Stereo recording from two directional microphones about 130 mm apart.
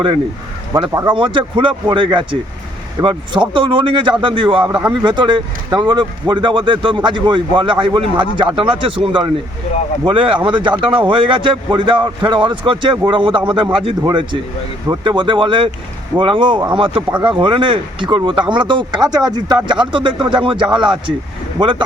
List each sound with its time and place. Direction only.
0.7 s speech: 25° right (ahead or behind)
1.1 s a man's voice: 40° right (ahead or behind)